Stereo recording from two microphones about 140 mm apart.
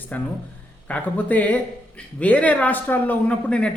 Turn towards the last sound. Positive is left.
turn(degrees=10)  # may be behind; listen again after turning